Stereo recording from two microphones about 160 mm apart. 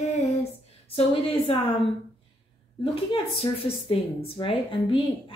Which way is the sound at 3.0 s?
35° left (ahead or behind).